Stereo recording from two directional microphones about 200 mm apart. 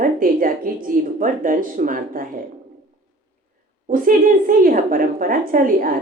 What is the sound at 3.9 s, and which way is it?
A woman's voice, 45° right (ahead or behind).